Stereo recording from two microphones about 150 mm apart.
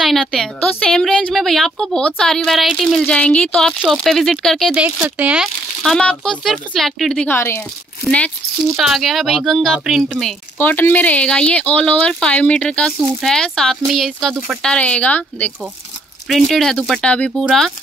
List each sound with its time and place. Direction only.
0.0 s a woman's voice: centre (ahead or behind)
4.8 s a woman's voice: 10° right (ahead or behind)
7.2 s a woman's voice: 15° left (ahead or behind)
10.6 s a woman's voice: 10° left (ahead or behind)